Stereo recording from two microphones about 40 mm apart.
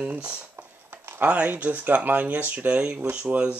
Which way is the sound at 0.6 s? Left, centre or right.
Right.